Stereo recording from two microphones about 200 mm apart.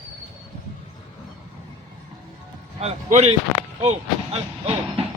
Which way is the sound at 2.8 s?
30° right (ahead or behind).